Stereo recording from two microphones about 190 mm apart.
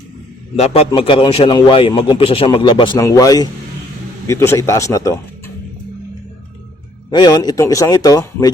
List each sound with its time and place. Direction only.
0.5 s a man's voice: 35° left (ahead or behind); by 5.1 s 15° left (ahead or behind)
7.1 s a man's voice: 20° left (ahead or behind)